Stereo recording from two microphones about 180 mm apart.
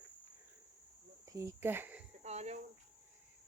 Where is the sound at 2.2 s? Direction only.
35° right (ahead or behind).